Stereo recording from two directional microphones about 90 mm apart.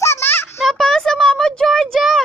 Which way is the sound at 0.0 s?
30° left (ahead or behind).